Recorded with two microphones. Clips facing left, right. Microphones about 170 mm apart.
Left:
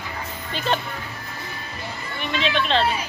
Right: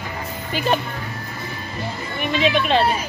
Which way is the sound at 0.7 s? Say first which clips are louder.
Right 3 dB; 10° right (ahead or behind).